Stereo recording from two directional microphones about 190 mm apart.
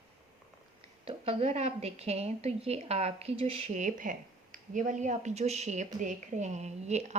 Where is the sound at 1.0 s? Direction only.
30° right (ahead or behind).